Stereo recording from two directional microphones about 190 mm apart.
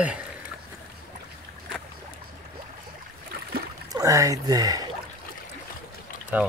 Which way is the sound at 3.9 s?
20° right (ahead or behind).